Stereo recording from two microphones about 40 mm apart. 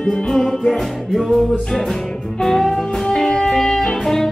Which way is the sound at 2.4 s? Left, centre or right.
Centre.